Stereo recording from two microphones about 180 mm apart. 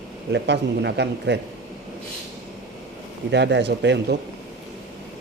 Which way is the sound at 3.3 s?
75° right (ahead or behind).